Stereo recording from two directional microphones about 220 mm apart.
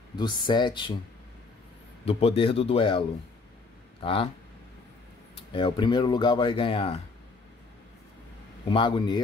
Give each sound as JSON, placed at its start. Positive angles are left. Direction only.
{"t": 0.1, "sound": "speech", "side_deg": 20}
{"t": 2.0, "sound": "speech", "side_deg": 25}
{"t": 4.0, "sound": "speech", "side_deg": 25}
{"t": 5.3, "sound": "speech", "side_deg": 25}
{"t": 8.6, "sound": "speech", "side_deg": 20}